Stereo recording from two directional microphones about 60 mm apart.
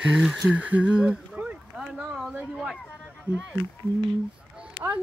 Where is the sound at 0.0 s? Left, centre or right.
Centre.